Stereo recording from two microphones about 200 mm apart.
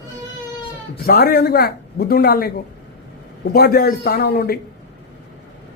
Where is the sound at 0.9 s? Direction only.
50° left (ahead or behind).